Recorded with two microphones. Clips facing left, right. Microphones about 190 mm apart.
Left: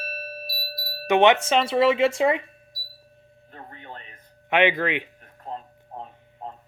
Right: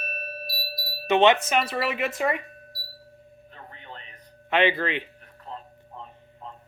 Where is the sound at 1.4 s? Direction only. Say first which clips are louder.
Left 5 dB; 25° left (ahead or behind).